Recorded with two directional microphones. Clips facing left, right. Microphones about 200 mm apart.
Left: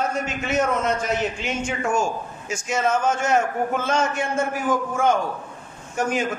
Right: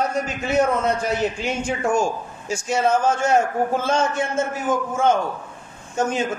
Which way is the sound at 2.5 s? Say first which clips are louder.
Right 3 dB; 30° right (ahead or behind).